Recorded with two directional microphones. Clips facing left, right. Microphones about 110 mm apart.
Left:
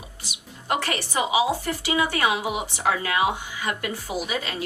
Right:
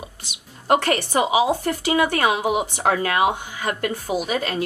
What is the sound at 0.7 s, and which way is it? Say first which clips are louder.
Speech: right 7 dB; 50° right (ahead or behind).